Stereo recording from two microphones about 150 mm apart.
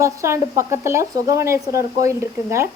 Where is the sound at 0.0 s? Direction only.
20° right (ahead or behind).